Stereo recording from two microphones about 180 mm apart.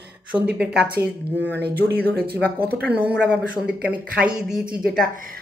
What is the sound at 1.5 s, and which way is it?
Speech, 65° right (ahead or behind).